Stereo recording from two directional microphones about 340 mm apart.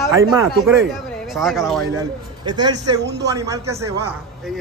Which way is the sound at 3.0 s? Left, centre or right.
Right.